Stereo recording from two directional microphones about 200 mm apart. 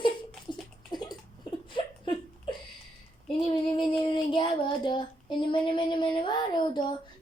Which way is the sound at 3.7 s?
25° left (ahead or behind).